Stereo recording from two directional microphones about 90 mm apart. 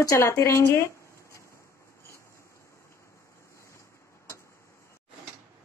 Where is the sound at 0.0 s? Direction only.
35° left (ahead or behind).